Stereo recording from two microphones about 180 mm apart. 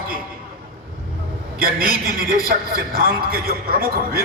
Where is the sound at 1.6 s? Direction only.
55° right (ahead or behind).